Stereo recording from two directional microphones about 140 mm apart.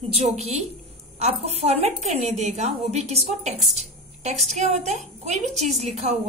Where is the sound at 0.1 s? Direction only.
50° right (ahead or behind).